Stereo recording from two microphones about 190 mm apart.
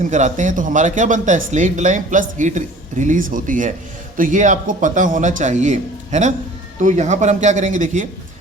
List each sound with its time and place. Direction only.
0.1 s speech: 40° right (ahead or behind)